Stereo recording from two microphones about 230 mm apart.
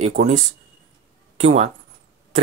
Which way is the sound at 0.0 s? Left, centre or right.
Right.